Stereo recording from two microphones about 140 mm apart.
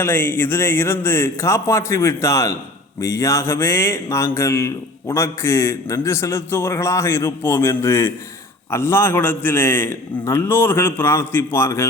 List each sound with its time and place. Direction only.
0.0 s a man's voice: 15° left (ahead or behind)